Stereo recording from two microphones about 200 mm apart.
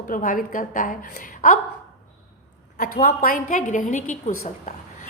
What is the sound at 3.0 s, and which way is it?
A woman's voice, 40° left (ahead or behind).